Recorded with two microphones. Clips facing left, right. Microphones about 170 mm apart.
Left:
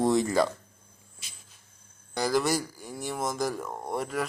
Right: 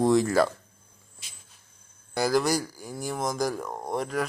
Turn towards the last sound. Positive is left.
turn(degrees=5)  # may be behind; listen again after turning